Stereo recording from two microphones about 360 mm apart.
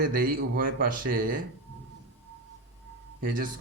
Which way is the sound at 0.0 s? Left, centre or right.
Right.